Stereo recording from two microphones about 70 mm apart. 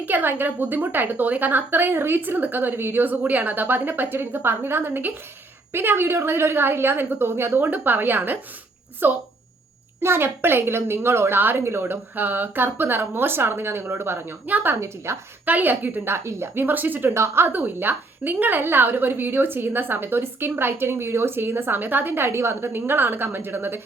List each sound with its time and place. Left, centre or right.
0.0 s a woman's voice: right
14.8 s speech: right
15.4 s a woman's voice: right
17.2 s a woman's voice: right